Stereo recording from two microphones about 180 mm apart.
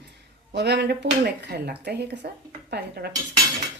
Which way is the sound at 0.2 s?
70° right (ahead or behind).